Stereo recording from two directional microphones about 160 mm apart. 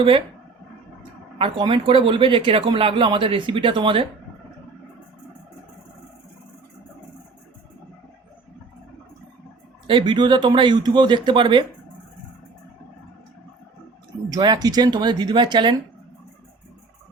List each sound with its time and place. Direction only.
1.4 s speech: 35° right (ahead or behind)
9.8 s speech: 30° right (ahead or behind)
14.3 s speech: 25° right (ahead or behind)